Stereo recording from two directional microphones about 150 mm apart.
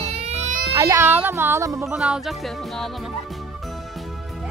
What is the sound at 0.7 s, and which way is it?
A child's voice, 20° right (ahead or behind).